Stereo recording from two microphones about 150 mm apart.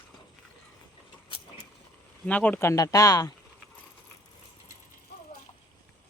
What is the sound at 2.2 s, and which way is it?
Speech, 10° left (ahead or behind).